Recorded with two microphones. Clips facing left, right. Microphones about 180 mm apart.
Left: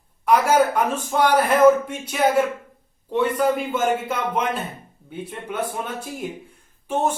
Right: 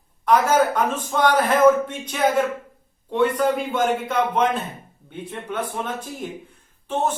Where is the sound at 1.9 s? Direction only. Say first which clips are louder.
Left 1 dB; 10° left (ahead or behind).